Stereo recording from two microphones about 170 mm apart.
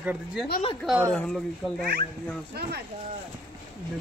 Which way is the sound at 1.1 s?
5° left (ahead or behind).